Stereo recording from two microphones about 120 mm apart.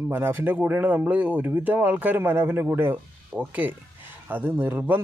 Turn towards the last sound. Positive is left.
turn(degrees=-15)  # may be behind; listen again after turning